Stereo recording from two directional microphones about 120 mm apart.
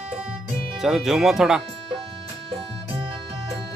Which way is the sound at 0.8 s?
5° right (ahead or behind).